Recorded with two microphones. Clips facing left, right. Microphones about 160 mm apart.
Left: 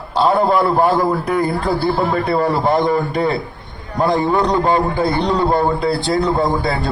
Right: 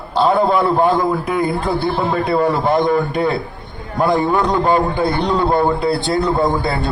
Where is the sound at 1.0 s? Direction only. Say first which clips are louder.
Left 1 dB; 15° right (ahead or behind).